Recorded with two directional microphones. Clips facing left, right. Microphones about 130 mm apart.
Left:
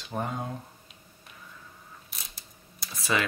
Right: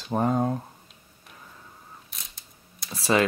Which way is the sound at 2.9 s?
35° right (ahead or behind).